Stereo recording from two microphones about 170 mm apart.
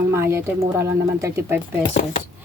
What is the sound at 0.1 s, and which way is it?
A woman's voice, 15° right (ahead or behind).